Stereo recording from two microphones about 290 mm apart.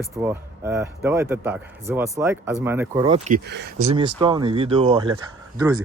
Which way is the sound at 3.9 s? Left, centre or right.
Centre.